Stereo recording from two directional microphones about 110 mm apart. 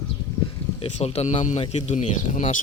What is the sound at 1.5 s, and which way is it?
Speech, 80° left.